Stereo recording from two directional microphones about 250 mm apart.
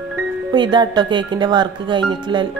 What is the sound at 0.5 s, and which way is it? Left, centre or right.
Speech, centre.